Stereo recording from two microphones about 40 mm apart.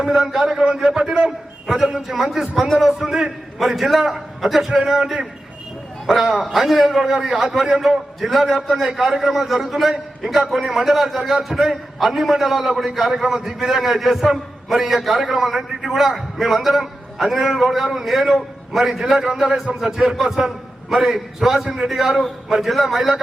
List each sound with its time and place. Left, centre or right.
0.0 s a man's voice: centre
1.6 s a man's voice: centre
8.9 s a man's voice: centre